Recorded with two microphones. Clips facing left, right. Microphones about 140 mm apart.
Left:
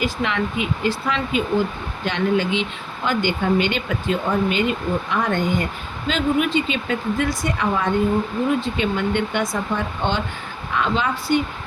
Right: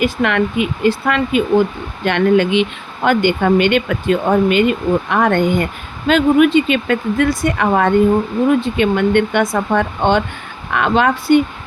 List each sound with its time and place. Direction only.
0.0 s speech: 60° right (ahead or behind)